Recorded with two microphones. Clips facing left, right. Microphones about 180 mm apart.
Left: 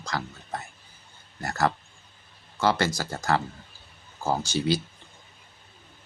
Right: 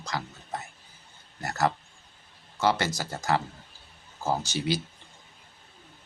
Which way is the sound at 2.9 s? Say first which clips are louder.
Left 1 dB; 15° right (ahead or behind).